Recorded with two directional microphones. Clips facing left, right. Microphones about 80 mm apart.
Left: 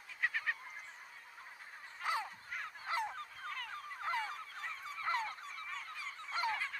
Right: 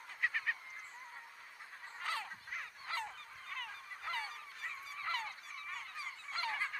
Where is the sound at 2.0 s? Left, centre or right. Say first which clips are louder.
Left 4 dB; centre.